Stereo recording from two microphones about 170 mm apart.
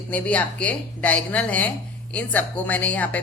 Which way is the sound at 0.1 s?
10° left (ahead or behind).